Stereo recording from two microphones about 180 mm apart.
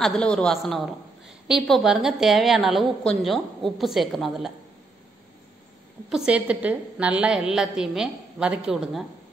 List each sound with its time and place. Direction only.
0.0 s a woman's voice: 5° left (ahead or behind)
6.0 s a woman's voice: 5° right (ahead or behind)